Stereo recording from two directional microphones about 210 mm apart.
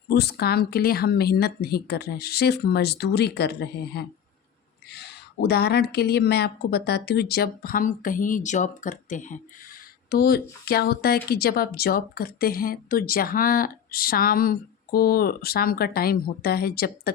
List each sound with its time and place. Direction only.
0.1 s speech: 50° left (ahead or behind)
10.1 s speech: 45° left (ahead or behind)